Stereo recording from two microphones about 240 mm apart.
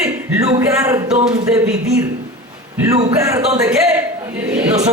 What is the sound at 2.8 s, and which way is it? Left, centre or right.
A man's voice, centre.